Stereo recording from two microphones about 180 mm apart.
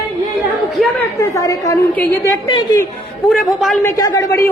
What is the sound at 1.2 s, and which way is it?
Speech, 20° left (ahead or behind).